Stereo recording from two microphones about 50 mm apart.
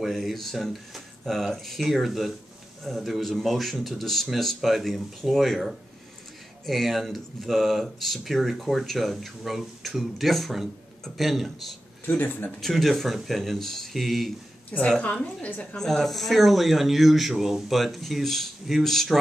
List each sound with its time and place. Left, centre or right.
0.0 s speech: centre
12.2 s speech: left
12.5 s speech: centre
15.7 s speech: centre